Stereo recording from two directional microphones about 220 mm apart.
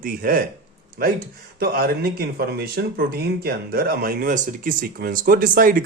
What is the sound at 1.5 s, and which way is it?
Speech, 40° right (ahead or behind).